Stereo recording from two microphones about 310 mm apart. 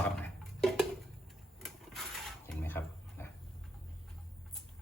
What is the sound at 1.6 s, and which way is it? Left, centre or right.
Printer, centre.